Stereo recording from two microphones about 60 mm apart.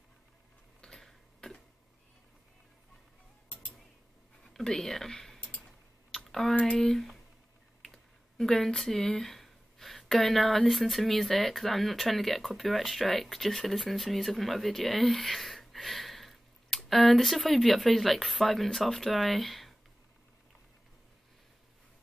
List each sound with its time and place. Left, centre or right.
0.7 s a sound: centre
4.6 s speech: centre
6.1 s typing: centre
6.8 s speech: centre